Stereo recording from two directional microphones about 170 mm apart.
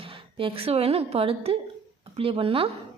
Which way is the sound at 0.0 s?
30° right (ahead or behind).